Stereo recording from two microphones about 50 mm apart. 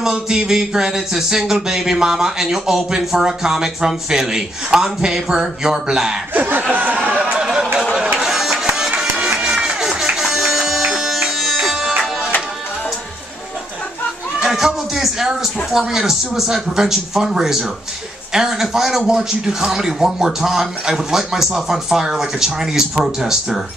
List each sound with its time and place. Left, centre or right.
0.0 s speech: centre
6.3 s speech: right
7.1 s a sound: right
8.2 s music: centre
14.4 s speech: centre